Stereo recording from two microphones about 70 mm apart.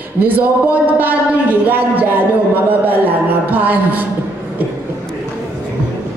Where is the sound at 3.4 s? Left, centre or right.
Right.